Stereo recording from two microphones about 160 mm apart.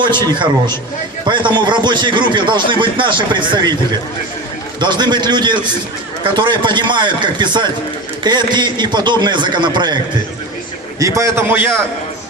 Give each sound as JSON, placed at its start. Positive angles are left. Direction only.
{"t": 1.2, "sound": "a man's voice", "side_deg": -30}
{"t": 4.8, "sound": "a man's voice", "side_deg": -30}
{"t": 11.0, "sound": "a man's voice", "side_deg": -20}